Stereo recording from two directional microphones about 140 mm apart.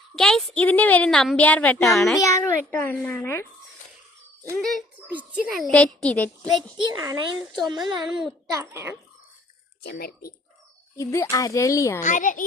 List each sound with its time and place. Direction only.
0.2 s a woman's voice: 5° left (ahead or behind)
2.1 s speech: 25° left (ahead or behind)
2.4 s a woman's voice: 15° left (ahead or behind)
4.5 s a woman's voice: centre (ahead or behind)
4.9 s a child's voice: 10° right (ahead or behind)
5.5 s a woman's voice: 5° left (ahead or behind)
7.0 s a child's voice: 25° right (ahead or behind)
7.3 s a woman's voice: centre (ahead or behind)
7.7 s speech: 30° right (ahead or behind)
8.4 s a child's voice: 20° right (ahead or behind)
9.9 s speech: 90° left
10.9 s speech: 20° left (ahead or behind)
12.0 s a child's voice: 65° left (ahead or behind)